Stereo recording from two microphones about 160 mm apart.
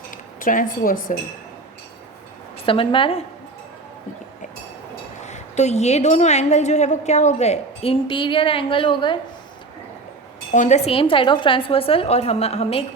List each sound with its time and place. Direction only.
0.3 s a woman's voice: 60° left (ahead or behind)
2.6 s a woman's voice: 35° left (ahead or behind)
5.2 s a woman's voice: 45° left (ahead or behind); by 9.1 s 30° left (ahead or behind)
10.5 s a woman's voice: 50° left (ahead or behind)